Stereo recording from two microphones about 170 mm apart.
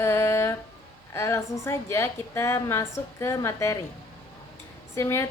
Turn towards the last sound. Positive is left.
turn(degrees=15)  # may be behind; listen again after turning